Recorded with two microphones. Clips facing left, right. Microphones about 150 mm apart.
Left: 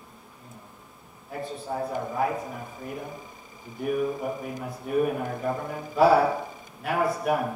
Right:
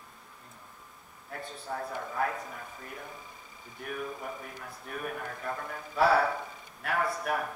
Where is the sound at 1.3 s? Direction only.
10° left (ahead or behind).